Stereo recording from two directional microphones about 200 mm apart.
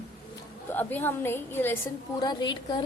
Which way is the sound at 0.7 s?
10° left (ahead or behind).